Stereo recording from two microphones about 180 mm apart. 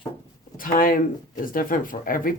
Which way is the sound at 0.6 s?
50° left (ahead or behind).